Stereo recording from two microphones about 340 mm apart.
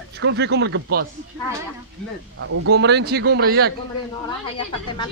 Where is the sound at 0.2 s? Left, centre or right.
Right.